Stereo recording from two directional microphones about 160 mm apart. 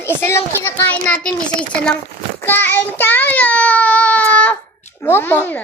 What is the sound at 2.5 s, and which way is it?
Child singing, 10° left (ahead or behind).